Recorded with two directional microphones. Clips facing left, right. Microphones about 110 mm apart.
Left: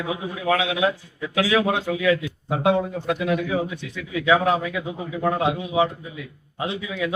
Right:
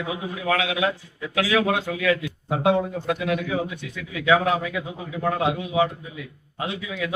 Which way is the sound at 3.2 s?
30° left (ahead or behind).